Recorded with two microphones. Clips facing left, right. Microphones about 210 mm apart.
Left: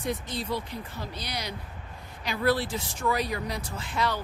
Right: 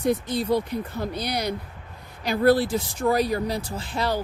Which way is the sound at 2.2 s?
40° right (ahead or behind).